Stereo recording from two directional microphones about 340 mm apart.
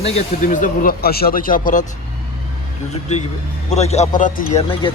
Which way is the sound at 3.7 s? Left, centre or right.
Centre.